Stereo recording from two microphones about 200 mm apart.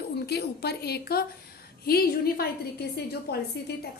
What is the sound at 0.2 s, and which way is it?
A woman's voice, 55° left (ahead or behind).